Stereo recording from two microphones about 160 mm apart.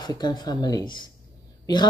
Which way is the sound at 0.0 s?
25° left (ahead or behind).